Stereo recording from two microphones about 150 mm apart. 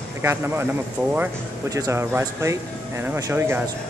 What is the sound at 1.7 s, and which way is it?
Speech, 20° right (ahead or behind).